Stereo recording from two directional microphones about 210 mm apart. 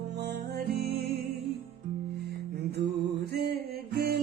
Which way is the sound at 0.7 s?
50° right (ahead or behind).